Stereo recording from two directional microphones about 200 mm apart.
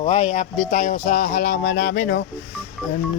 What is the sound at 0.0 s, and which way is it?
Speech, 35° left (ahead or behind).